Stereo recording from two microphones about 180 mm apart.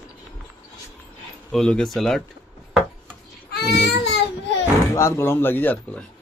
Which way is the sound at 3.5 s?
65° left (ahead or behind).